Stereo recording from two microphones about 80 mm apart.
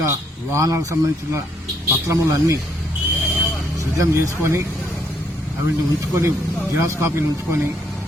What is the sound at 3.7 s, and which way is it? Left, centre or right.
Speech, right.